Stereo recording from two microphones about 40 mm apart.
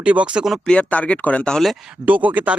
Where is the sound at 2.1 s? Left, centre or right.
Right.